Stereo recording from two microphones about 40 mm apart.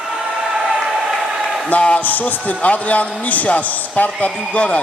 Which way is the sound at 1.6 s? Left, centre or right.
Left.